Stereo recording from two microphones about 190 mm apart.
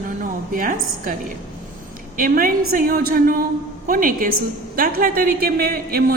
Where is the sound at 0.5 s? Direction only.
45° right (ahead or behind).